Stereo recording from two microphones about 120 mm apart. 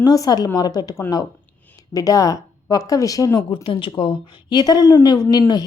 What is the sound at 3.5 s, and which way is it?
A woman's voice, 45° left (ahead or behind).